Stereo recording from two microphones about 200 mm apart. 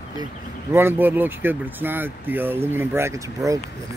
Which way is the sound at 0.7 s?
10° right (ahead or behind).